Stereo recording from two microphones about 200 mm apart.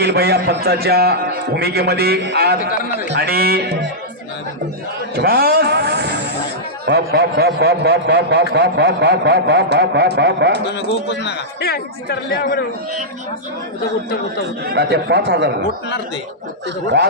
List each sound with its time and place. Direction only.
0.0 s a man's voice: 55° right (ahead or behind)
2.6 s a man's voice: 45° left (ahead or behind)
3.1 s a man's voice: 50° right (ahead or behind)
5.1 s a man's voice: 50° right (ahead or behind)
10.7 s a man's voice: 60° left (ahead or behind)
14.6 s a man's voice: 55° right (ahead or behind)